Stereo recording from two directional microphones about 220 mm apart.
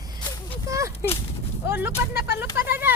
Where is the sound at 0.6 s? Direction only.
15° right (ahead or behind).